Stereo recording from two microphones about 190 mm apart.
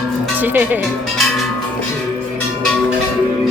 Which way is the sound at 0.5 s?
10° right (ahead or behind).